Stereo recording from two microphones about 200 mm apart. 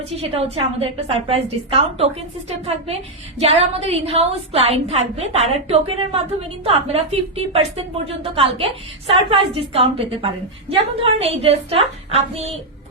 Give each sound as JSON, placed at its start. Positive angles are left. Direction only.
{"t": 0.0, "sound": "a woman's voice", "side_deg": -30}